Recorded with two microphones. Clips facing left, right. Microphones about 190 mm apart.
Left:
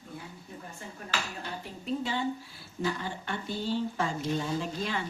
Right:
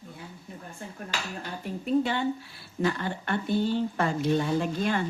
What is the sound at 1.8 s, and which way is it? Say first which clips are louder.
A woman's voice: right 6 dB; 65° right (ahead or behind).